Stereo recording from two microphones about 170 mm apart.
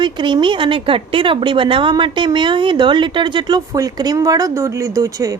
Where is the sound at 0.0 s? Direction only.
25° right (ahead or behind).